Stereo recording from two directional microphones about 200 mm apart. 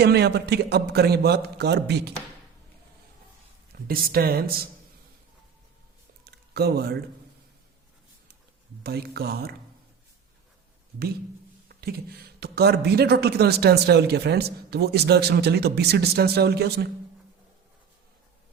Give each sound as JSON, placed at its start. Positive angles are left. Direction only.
{"t": 0.0, "sound": "a man's voice", "side_deg": -55}
{"t": 3.7, "sound": "speech", "side_deg": -50}
{"t": 6.2, "sound": "a sound", "side_deg": -50}
{"t": 8.8, "sound": "speech", "side_deg": -50}
{"t": 11.7, "sound": "speech", "side_deg": -50}